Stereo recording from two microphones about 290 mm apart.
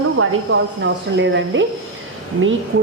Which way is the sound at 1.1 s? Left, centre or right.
Right.